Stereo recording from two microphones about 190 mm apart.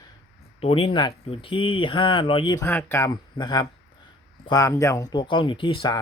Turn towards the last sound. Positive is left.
turn(degrees=25)  # may be behind; listen again after turning